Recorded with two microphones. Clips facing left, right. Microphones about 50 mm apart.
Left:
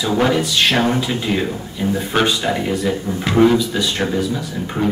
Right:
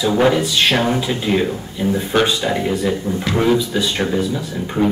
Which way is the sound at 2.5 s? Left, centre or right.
Centre.